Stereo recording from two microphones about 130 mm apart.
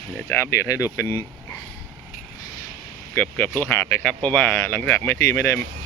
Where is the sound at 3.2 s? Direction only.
15° left (ahead or behind).